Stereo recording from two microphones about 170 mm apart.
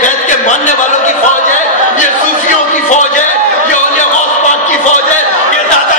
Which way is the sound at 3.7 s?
45° left (ahead or behind).